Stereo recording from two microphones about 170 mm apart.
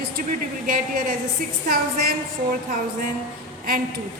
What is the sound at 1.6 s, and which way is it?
Speech, 60° right (ahead or behind).